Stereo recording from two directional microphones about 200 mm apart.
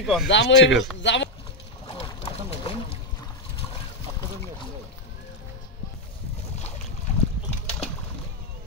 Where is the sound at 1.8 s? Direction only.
25° left (ahead or behind).